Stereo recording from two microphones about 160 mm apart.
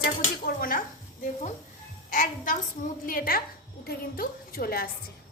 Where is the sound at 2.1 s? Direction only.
55° left (ahead or behind).